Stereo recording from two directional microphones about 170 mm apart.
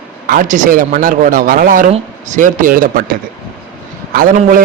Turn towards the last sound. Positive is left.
turn(degrees=-55)  # may be behind; listen again after turning